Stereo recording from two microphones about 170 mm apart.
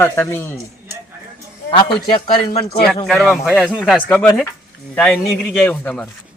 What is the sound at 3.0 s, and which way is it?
Speech, centre (ahead or behind).